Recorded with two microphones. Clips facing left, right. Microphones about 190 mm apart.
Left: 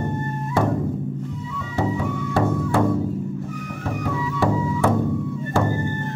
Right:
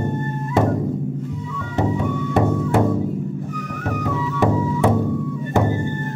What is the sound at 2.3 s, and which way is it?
Music, 20° right (ahead or behind).